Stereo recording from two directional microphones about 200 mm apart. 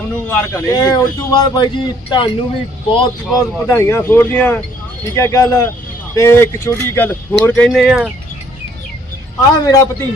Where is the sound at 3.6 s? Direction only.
15° left (ahead or behind).